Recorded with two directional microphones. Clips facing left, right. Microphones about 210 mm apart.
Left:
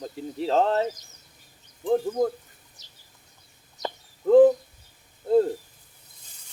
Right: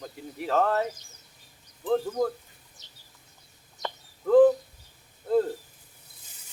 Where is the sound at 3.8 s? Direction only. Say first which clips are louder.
Left 4 dB; 20° left (ahead or behind).